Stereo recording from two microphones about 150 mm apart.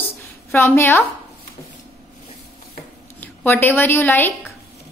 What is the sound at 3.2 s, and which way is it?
A woman's voice, 15° left (ahead or behind).